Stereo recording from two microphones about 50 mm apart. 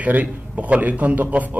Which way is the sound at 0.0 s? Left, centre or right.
Right.